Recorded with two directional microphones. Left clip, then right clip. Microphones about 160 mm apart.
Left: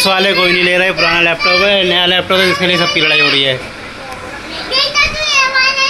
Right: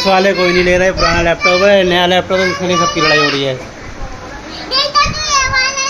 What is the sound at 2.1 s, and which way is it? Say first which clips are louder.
Speech: left 1 dB; 10° right (ahead or behind).